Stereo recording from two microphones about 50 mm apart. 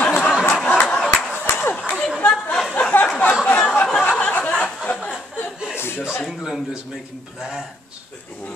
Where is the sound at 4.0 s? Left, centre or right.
Left.